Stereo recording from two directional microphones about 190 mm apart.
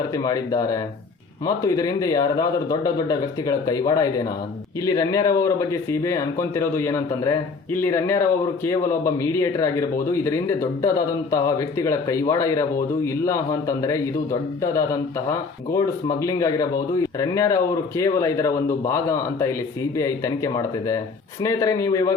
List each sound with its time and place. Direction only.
0.1 s a man's voice: 20° left (ahead or behind)